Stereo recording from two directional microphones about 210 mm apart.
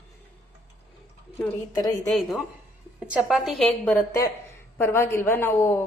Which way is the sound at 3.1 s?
5° right (ahead or behind).